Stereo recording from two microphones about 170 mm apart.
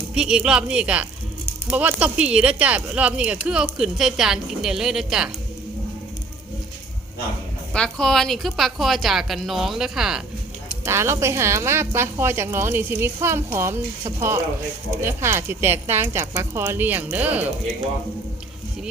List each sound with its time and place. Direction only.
0.1 s speech: 5° right (ahead or behind)
7.7 s speech: 5° left (ahead or behind)
10.8 s a woman's voice: 15° right (ahead or behind)